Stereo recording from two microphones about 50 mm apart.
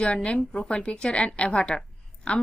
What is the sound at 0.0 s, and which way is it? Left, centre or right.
A woman's voice, left.